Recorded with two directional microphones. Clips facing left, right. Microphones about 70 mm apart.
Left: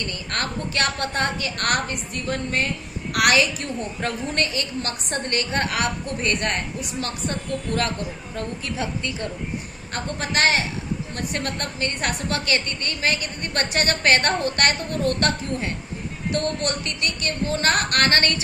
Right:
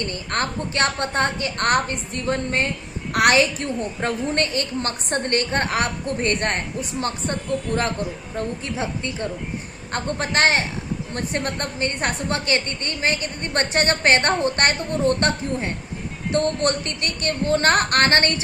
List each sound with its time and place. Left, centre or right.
0.0 s a woman's voice: right
8.4 s a woman's voice: right